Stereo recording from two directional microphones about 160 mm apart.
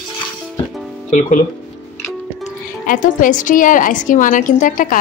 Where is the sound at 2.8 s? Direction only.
55° left (ahead or behind).